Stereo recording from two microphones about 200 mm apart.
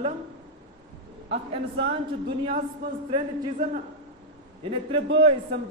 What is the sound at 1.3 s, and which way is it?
Speech, 60° right (ahead or behind).